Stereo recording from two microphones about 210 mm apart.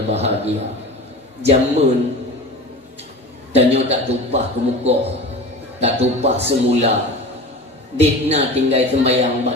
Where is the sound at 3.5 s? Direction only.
30° right (ahead or behind).